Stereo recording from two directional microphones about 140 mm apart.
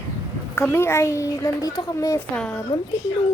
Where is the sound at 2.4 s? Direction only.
10° left (ahead or behind).